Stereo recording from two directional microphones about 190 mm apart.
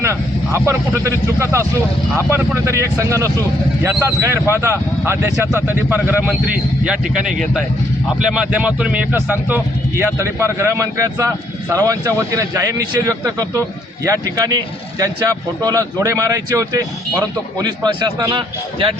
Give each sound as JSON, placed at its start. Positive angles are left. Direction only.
{"t": 0.0, "sound": "speech", "side_deg": -15}